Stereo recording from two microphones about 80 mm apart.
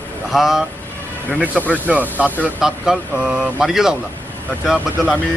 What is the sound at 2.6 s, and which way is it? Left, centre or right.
A man's voice, centre.